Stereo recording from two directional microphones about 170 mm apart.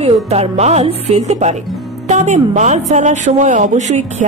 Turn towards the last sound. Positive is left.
turn(degrees=-45)  # may be behind; listen again after turning